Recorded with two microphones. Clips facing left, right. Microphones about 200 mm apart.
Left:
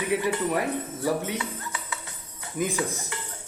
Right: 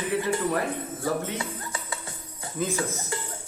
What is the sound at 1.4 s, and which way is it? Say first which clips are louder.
Cutlery: even; 30° right (ahead or behind).